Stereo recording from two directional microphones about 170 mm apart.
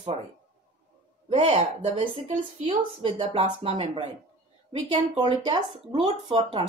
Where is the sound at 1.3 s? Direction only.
40° right (ahead or behind).